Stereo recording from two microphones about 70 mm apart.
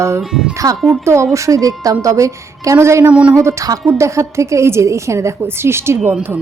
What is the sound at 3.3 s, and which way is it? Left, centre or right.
Speech, right.